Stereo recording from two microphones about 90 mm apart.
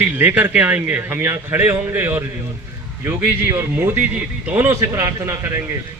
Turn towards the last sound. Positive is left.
turn(degrees=-35)  # may be behind; listen again after turning